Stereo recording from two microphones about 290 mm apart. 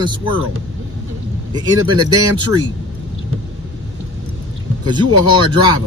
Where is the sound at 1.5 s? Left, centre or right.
Centre.